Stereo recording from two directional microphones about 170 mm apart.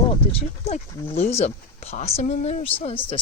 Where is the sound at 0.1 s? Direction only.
35° left (ahead or behind).